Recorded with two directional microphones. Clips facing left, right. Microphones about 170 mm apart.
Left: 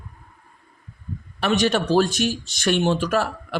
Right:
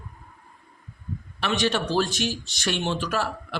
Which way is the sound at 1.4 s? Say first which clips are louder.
Left 5 dB; 45° left (ahead or behind).